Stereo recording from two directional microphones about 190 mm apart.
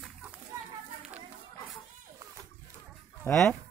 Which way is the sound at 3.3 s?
Centre (ahead or behind).